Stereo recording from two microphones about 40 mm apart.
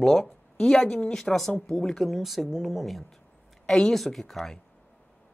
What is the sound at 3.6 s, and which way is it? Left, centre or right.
Speech, left.